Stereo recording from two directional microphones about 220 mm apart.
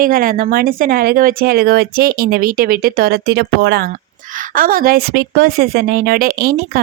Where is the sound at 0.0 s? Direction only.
40° right (ahead or behind).